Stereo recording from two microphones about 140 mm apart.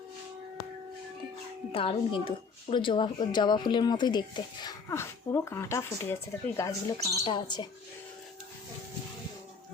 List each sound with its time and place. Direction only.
1.7 s a woman's voice: 40° left (ahead or behind)
4.9 s speech: 20° left (ahead or behind)
7.3 s a woman's voice: 35° left (ahead or behind)